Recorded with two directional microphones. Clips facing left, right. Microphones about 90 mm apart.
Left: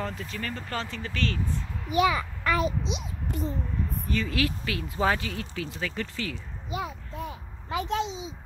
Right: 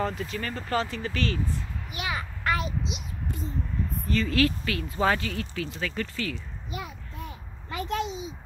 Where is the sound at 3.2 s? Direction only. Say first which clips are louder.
Left 4 dB; 65° left (ahead or behind).